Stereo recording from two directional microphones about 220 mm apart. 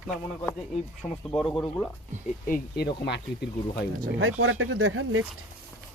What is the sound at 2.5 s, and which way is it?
Speech, 45° left (ahead or behind).